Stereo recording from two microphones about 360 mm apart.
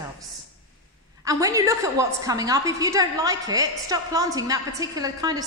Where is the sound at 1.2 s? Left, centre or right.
Centre.